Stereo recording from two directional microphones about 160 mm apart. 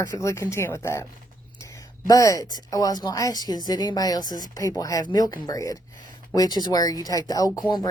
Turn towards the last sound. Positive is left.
turn(degrees=20)  # may be behind; listen again after turning